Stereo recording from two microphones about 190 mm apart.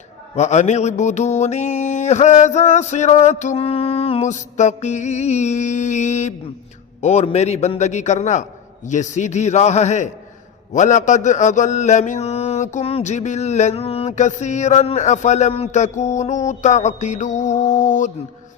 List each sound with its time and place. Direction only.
0.3 s mantra: 35° left (ahead or behind)